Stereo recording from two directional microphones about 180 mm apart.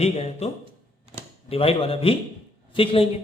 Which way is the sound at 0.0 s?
35° left (ahead or behind).